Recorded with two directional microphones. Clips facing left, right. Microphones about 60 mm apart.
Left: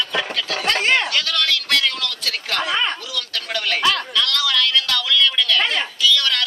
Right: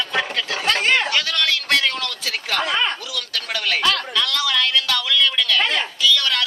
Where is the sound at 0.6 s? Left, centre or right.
Centre.